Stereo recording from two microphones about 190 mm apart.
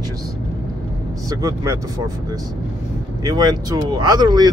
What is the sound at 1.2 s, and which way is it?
Speech, 15° right (ahead or behind).